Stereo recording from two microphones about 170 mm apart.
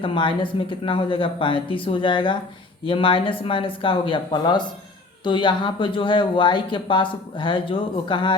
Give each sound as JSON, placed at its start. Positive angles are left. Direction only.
{"t": 0.0, "sound": "speech", "side_deg": 30}